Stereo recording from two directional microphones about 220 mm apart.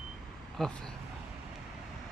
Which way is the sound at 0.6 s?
Centre (ahead or behind).